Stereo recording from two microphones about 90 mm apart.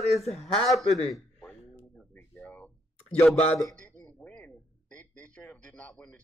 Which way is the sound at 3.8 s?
15° left (ahead or behind).